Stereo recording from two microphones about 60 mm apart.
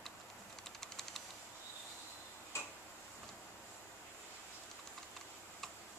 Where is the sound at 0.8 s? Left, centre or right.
Centre.